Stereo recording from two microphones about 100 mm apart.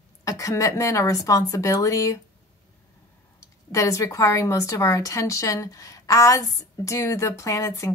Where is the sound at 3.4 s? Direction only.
30° left (ahead or behind).